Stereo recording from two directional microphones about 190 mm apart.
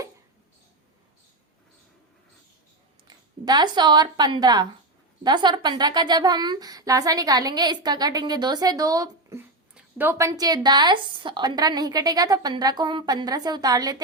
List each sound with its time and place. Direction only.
3.4 s a woman's voice: 20° right (ahead or behind)